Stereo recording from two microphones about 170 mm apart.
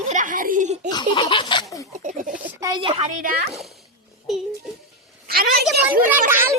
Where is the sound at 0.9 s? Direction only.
25° left (ahead or behind).